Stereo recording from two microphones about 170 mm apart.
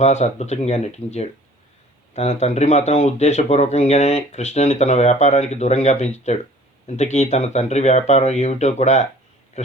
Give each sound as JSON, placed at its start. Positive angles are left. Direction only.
{"t": 0.0, "sound": "speech", "side_deg": 40}